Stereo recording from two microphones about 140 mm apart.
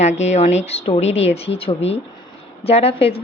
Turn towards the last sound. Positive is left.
turn(degrees=45)  # may be behind; listen again after turning